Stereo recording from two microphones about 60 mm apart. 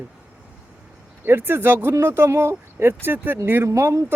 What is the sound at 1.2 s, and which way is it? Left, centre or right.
Speech, right.